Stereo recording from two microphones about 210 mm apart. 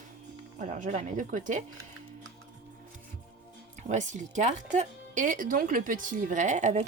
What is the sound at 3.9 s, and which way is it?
Speech, 35° right (ahead or behind).